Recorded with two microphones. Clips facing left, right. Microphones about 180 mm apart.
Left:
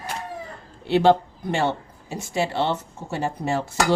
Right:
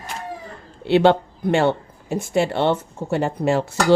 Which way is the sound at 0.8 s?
70° right (ahead or behind).